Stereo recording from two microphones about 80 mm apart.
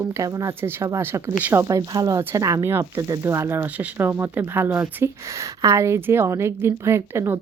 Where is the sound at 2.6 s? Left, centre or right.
Right.